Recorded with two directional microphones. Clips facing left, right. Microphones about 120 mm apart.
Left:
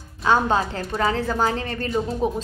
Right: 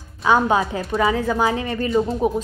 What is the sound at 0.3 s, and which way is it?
A woman's voice, 10° right (ahead or behind).